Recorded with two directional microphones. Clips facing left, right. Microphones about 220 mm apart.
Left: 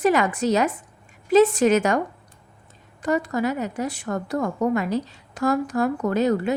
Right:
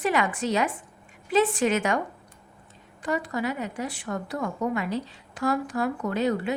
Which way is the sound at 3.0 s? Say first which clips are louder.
Left 5 dB; 45° left (ahead or behind).